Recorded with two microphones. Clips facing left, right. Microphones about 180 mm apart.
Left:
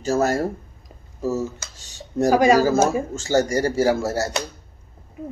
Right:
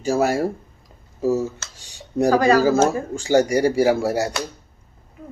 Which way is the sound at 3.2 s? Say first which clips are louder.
Right 4 dB; 15° right (ahead or behind).